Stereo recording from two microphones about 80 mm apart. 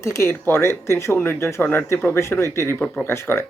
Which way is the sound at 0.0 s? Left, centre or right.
Left.